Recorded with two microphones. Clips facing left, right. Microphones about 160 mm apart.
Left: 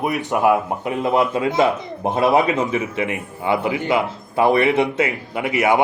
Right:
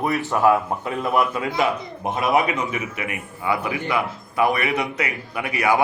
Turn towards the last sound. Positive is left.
turn(degrees=25)  # may be behind; listen again after turning